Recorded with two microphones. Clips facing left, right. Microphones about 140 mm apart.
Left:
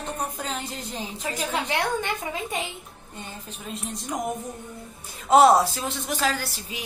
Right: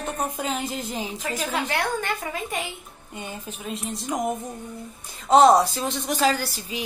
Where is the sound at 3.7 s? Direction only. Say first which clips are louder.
Right 3 dB; centre (ahead or behind).